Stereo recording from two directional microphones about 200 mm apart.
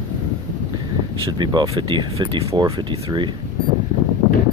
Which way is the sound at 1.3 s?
20° right (ahead or behind).